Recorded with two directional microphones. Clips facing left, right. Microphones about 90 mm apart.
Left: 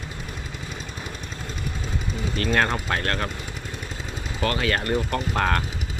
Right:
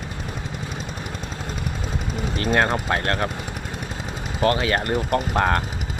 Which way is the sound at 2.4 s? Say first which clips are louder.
Right 2 dB; 25° right (ahead or behind).